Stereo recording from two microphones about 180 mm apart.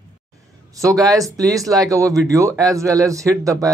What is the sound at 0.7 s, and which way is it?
Speech, 20° right (ahead or behind).